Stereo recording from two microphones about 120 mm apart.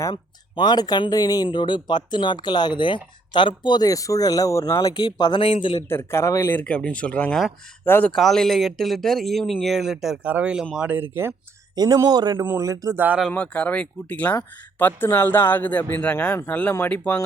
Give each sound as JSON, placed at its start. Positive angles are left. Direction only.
{"t": 0.5, "sound": "speech", "side_deg": 35}
{"t": 5.9, "sound": "a man's voice", "side_deg": 20}
{"t": 6.6, "sound": "speech", "side_deg": 10}
{"t": 8.1, "sound": "speech", "side_deg": 5}
{"t": 11.7, "sound": "a man's voice", "side_deg": -35}
{"t": 13.0, "sound": "speech", "side_deg": -10}
{"t": 13.3, "sound": "speech", "side_deg": 10}